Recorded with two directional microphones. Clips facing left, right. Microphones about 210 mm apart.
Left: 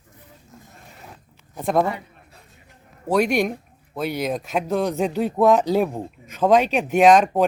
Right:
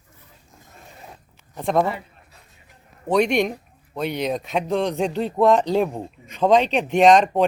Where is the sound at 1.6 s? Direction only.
5° left (ahead or behind).